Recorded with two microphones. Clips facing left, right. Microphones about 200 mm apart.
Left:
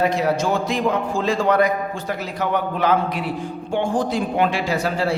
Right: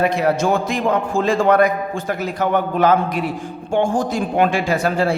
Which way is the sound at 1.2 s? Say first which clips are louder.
Right 3 dB; 50° right (ahead or behind).